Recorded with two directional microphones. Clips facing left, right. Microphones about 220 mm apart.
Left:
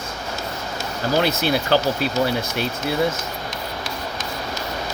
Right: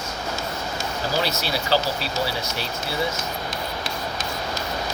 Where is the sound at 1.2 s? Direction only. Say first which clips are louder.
Left 8 dB; 55° left (ahead or behind).